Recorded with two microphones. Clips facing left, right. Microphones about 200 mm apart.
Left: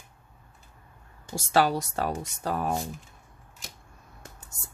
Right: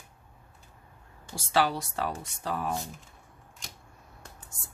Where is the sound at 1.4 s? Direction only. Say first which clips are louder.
Left 3 dB; 45° left (ahead or behind).